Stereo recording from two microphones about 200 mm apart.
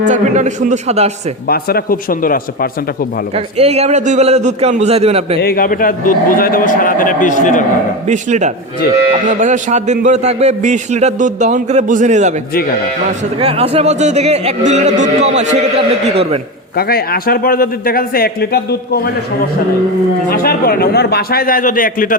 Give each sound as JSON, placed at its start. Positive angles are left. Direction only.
{"t": 0.0, "sound": "a man's voice", "side_deg": -35}
{"t": 1.5, "sound": "a man's voice", "side_deg": 50}
{"t": 3.3, "sound": "a man's voice", "side_deg": -30}
{"t": 5.4, "sound": "a man's voice", "side_deg": 50}
{"t": 8.0, "sound": "a man's voice", "side_deg": -35}
{"t": 13.4, "sound": "a man's voice", "side_deg": -30}
{"t": 16.7, "sound": "a man's voice", "side_deg": 50}
{"t": 20.3, "sound": "a man's voice", "side_deg": 45}